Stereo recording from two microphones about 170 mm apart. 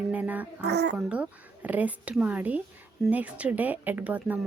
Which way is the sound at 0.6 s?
80° right.